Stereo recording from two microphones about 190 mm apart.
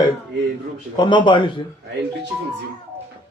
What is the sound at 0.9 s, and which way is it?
Speech, 25° left (ahead or behind).